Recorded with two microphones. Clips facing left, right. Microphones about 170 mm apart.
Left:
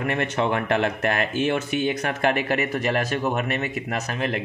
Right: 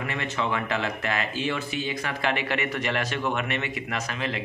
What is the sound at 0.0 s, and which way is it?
Speech, 55° left (ahead or behind).